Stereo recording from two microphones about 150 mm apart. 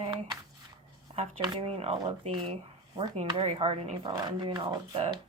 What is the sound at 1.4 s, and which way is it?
Speech, 35° right (ahead or behind).